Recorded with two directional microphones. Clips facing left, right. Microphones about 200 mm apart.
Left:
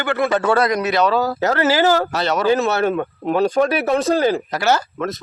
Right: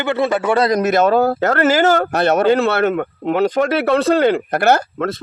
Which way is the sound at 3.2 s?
20° right (ahead or behind).